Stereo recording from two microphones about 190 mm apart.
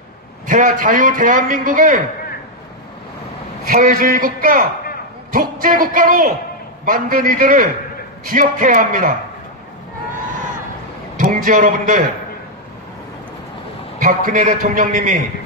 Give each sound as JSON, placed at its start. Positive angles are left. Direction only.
{"t": 0.5, "sound": "a man's voice", "side_deg": -45}
{"t": 3.6, "sound": "a man's voice", "side_deg": -50}
{"t": 11.1, "sound": "a man's voice", "side_deg": -45}
{"t": 13.9, "sound": "a man's voice", "side_deg": -45}